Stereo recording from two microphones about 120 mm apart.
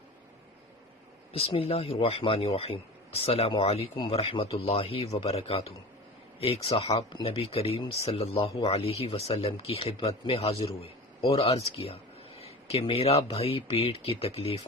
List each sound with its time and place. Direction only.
1.3 s speech: 55° left (ahead or behind)